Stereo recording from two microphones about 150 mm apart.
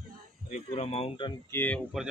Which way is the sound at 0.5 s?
45° left (ahead or behind).